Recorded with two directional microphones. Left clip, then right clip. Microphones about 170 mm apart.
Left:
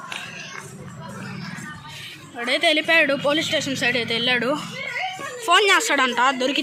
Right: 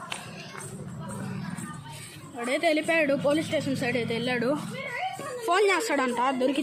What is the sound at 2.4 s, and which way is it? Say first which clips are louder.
Speech: left 6 dB; centre (ahead or behind).